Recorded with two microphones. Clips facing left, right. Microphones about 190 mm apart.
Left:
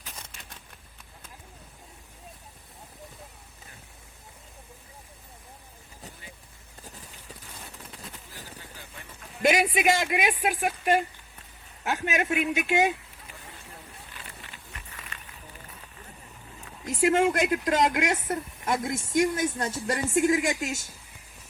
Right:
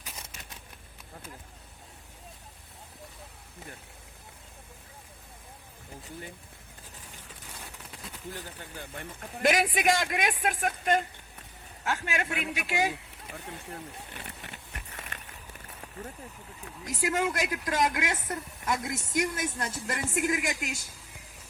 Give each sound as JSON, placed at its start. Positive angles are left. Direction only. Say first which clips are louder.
{"t": 9.4, "sound": "speech", "louder": "left 3 dB", "side_deg": 0}
{"t": 16.8, "sound": "speech", "louder": "left 7 dB", "side_deg": 25}